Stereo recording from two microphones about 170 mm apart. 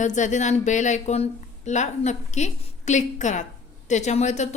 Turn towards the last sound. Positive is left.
turn(degrees=40)  # may be behind; listen again after turning